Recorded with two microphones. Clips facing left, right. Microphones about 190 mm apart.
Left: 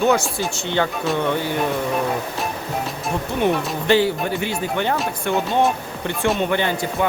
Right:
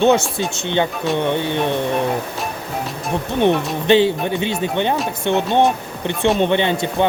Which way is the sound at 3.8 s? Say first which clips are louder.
Right 3 dB; 20° right (ahead or behind).